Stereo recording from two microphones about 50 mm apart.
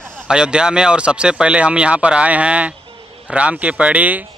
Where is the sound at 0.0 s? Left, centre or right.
Centre.